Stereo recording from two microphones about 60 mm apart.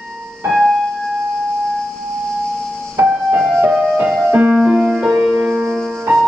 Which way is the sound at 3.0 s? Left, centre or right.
Right.